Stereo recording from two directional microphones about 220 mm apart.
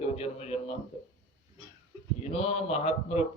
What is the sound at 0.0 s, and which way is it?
Speech, 30° left (ahead or behind).